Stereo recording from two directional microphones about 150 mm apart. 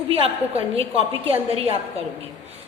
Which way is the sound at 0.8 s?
40° right (ahead or behind).